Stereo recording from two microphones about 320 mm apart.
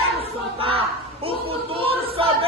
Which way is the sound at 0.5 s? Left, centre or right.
Centre.